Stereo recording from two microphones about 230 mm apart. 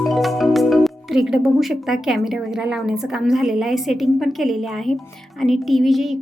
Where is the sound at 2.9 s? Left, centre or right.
Centre.